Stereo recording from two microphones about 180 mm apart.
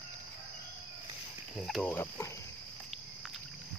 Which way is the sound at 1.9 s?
15° left (ahead or behind).